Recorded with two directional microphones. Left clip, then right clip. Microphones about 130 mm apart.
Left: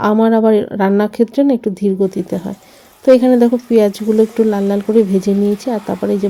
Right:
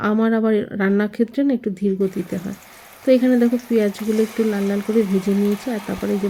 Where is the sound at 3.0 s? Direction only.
40° left (ahead or behind).